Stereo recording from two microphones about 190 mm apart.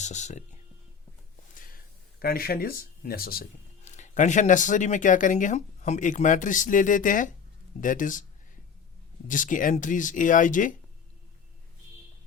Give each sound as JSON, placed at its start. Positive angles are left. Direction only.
{"t": 0.0, "sound": "speech", "side_deg": 40}
{"t": 1.5, "sound": "a sound", "side_deg": 50}
{"t": 3.8, "sound": "speech", "side_deg": 40}
{"t": 9.2, "sound": "speech", "side_deg": 45}